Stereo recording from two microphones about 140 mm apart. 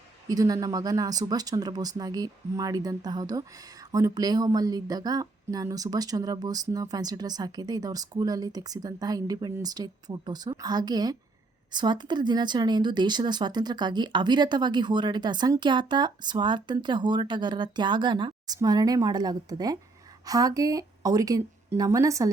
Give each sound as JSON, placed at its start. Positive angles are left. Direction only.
{"t": 0.3, "sound": "speech", "side_deg": -25}